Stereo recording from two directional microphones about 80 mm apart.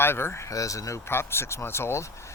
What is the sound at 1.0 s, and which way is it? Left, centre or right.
Speech, left.